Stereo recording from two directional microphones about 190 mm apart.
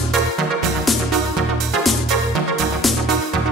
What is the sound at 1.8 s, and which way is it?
Music, centre (ahead or behind).